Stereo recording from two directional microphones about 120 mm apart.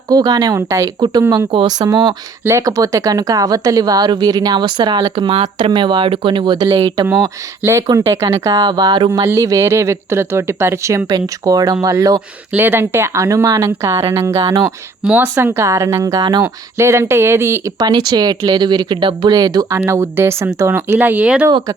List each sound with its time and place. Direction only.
0.1 s speech: 30° right (ahead or behind)
0.9 s speech: 40° right (ahead or behind)
6.9 s speech: 30° right (ahead or behind)
9.0 s speech: 25° right (ahead or behind)
12.5 s speech: 20° right (ahead or behind)
17.7 s speech: 35° right (ahead or behind)
19.8 s speech: 20° right (ahead or behind)